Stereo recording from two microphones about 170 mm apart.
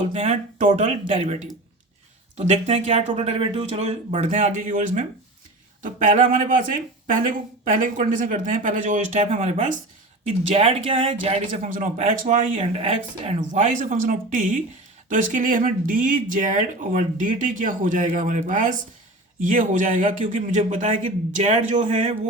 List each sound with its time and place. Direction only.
0.0 s speech: 35° right (ahead or behind)
11.7 s speech: 50° right (ahead or behind)